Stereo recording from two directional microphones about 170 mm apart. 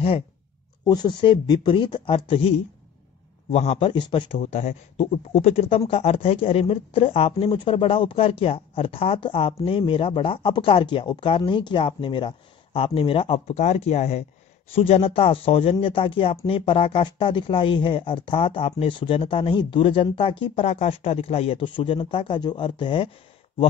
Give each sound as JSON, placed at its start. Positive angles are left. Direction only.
{"t": 0.8, "sound": "speech", "side_deg": 25}
{"t": 3.5, "sound": "speech", "side_deg": 35}
{"t": 4.4, "sound": "speech", "side_deg": 40}